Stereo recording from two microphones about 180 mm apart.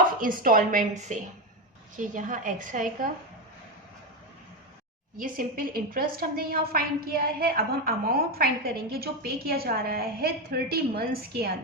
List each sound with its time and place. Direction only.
0.2 s a woman's voice: 50° right (ahead or behind)
5.1 s a woman's voice: 50° right (ahead or behind)